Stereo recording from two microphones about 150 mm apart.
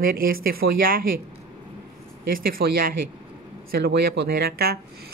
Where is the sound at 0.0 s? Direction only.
75° right (ahead or behind).